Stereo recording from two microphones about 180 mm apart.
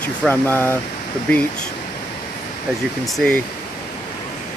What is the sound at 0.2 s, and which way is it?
Speech, 10° left (ahead or behind).